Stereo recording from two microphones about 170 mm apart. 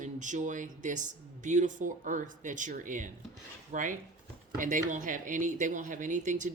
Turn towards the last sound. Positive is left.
turn(degrees=-50)  # may be behind; listen again after turning